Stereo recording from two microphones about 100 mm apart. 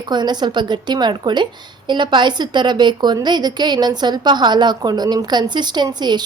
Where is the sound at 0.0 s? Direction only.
45° right (ahead or behind).